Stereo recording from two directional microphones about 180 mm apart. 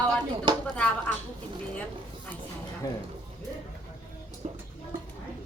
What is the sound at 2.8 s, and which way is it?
Speech, 20° left (ahead or behind).